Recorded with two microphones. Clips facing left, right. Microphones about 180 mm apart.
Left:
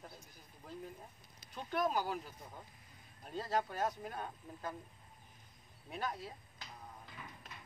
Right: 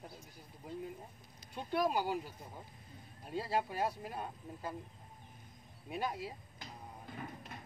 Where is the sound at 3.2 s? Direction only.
10° right (ahead or behind).